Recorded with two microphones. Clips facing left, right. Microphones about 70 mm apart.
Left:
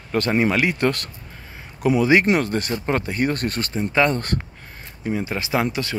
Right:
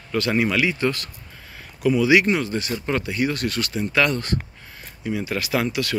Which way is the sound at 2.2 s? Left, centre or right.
Left.